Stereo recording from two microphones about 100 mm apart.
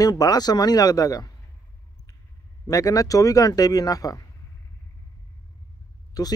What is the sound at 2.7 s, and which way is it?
Speech, 35° left (ahead or behind).